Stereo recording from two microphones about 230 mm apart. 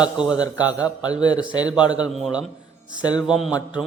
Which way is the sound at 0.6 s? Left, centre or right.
Centre.